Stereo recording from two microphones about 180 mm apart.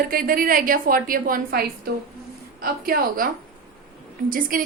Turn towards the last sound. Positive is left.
turn(degrees=-50)  # may be behind; listen again after turning